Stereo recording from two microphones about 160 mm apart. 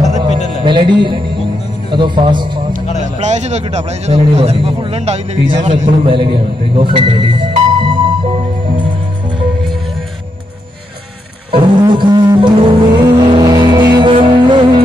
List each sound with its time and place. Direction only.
0.2 s music: 30° right (ahead or behind)
1.9 s speech: 30° right (ahead or behind)
3.2 s a man's voice: 45° right (ahead or behind)
7.8 s music: 35° right (ahead or behind)
11.5 s music: 30° right (ahead or behind)